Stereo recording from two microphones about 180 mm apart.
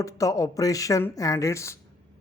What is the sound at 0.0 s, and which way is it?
Speech, 20° left (ahead or behind).